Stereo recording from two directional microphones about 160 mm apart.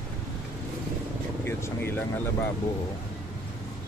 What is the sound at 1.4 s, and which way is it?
Vehicle, 15° left (ahead or behind).